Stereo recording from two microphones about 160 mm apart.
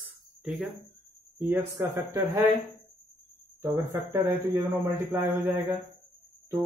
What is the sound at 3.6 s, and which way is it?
A man's voice, 15° right (ahead or behind).